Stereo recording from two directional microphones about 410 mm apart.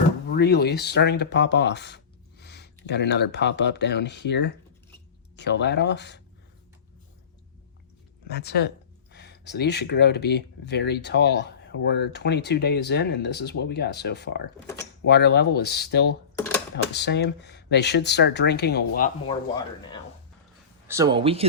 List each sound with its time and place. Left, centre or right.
0.3 s speech: left
8.3 s speech: left
20.8 s speech: centre